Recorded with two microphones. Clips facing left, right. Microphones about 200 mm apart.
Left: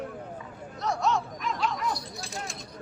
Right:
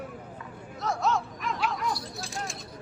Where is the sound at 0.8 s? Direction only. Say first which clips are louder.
Left 1 dB; centre (ahead or behind).